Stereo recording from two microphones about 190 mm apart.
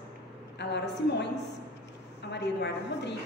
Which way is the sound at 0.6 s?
65° left (ahead or behind).